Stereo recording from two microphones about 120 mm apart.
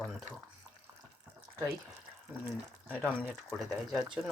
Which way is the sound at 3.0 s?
10° left (ahead or behind).